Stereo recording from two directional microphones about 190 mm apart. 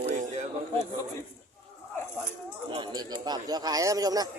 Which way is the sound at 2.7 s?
25° right (ahead or behind).